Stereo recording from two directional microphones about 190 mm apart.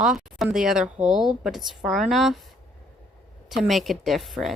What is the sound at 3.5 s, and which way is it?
Speech, centre (ahead or behind).